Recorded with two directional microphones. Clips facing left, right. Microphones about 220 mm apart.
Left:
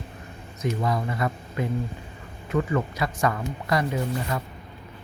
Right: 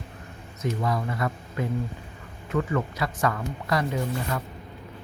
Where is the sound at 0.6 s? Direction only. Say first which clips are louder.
Left 1 dB; 15° left (ahead or behind).